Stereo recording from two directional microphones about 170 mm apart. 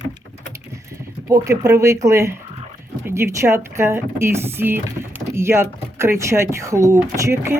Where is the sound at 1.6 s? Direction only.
20° right (ahead or behind).